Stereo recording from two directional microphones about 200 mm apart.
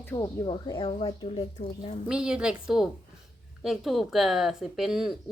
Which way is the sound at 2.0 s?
5° right (ahead or behind).